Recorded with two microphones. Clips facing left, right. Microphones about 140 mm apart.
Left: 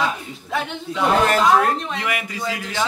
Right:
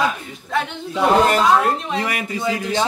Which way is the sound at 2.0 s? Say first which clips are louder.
Right 2 dB; 40° right (ahead or behind).